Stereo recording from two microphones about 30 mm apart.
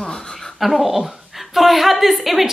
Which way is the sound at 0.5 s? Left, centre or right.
Centre.